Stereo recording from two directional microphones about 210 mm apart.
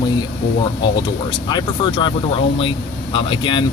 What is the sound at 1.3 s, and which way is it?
Speech, 25° left (ahead or behind).